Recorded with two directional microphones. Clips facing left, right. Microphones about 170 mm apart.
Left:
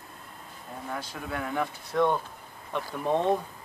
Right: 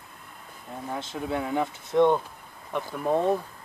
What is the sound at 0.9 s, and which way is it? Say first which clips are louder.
Speech: right 6 dB; 25° right (ahead or behind).